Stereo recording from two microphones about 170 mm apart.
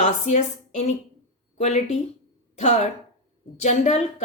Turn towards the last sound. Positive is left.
turn(degrees=45)  # may be behind; listen again after turning